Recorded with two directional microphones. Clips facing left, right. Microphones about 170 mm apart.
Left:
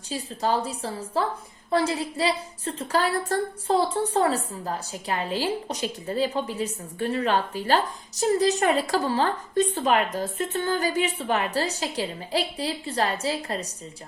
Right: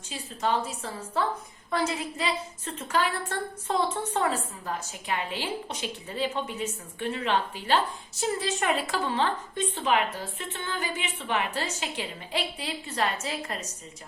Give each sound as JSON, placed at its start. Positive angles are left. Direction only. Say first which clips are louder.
{"t": 0.1, "sound": "a woman's voice", "louder": "left 3 dB", "side_deg": 35}